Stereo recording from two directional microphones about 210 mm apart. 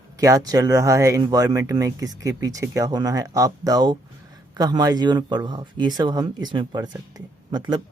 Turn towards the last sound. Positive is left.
turn(degrees=-20)  # may be behind; listen again after turning